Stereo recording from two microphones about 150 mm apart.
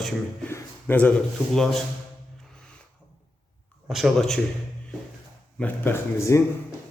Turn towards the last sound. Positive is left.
turn(degrees=20)  # may be behind; listen again after turning